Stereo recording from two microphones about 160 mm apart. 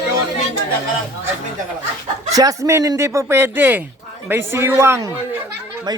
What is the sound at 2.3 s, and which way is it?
Speech, 20° right (ahead or behind).